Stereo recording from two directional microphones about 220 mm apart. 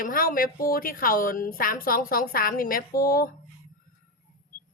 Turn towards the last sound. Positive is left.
turn(degrees=40)  # may be behind; listen again after turning